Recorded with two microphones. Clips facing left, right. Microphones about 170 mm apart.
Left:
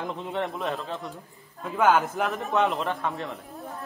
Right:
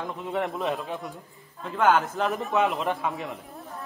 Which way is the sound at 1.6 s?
5° left (ahead or behind).